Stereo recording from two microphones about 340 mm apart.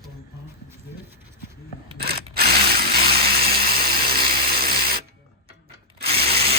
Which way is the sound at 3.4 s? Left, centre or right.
Right.